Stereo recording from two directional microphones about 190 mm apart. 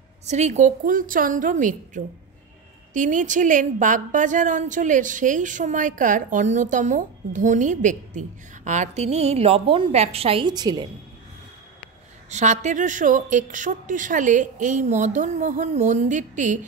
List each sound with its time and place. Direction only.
0.3 s a woman's voice: 40° right (ahead or behind); by 10.9 s 20° right (ahead or behind)
12.3 s a woman's voice: 40° right (ahead or behind)